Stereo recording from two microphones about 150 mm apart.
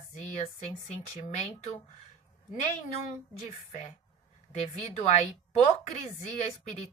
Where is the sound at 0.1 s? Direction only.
50° left (ahead or behind).